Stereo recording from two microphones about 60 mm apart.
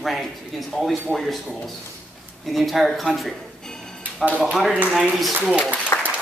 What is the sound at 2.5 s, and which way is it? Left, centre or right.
Speech, centre.